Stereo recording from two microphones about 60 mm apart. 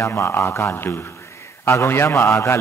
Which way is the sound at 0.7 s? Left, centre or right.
Left.